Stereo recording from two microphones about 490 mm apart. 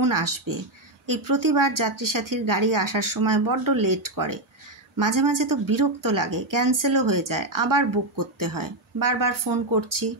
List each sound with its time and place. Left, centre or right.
0.0 s speech: right